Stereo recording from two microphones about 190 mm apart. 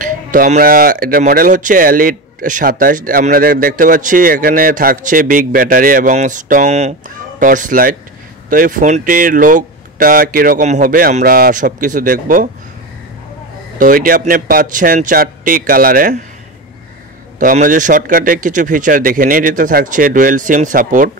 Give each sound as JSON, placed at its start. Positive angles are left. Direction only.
{"t": 0.0, "sound": "speech", "side_deg": -45}
{"t": 13.7, "sound": "speech", "side_deg": -45}
{"t": 17.4, "sound": "speech", "side_deg": -45}